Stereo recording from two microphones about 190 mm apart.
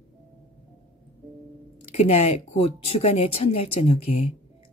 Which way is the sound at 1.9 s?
30° left (ahead or behind).